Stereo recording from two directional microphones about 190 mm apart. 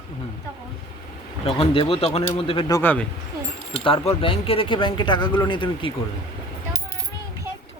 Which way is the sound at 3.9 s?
30° left (ahead or behind).